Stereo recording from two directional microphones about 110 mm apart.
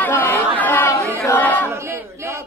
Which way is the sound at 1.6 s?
25° right (ahead or behind).